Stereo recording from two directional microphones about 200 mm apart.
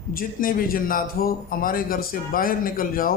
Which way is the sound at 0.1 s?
45° left (ahead or behind).